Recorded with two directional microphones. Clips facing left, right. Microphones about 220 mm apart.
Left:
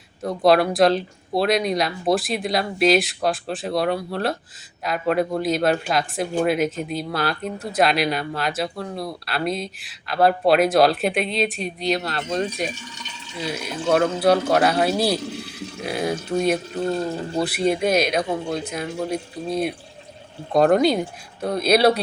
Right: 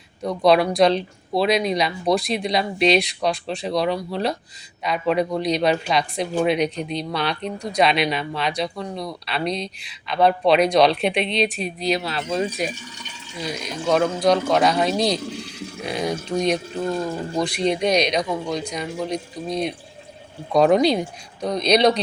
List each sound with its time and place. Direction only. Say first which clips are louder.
0.2 s speech: even; centre (ahead or behind)
15.4 s sheep: even; 55° left (ahead or behind)
15.9 s speech: left 1 dB; 5° left (ahead or behind)